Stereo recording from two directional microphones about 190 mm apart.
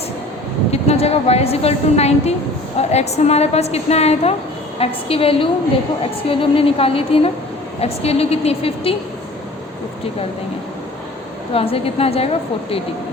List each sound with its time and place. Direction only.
0.7 s a woman's voice: 35° left (ahead or behind)
11.5 s a woman's voice: 30° left (ahead or behind)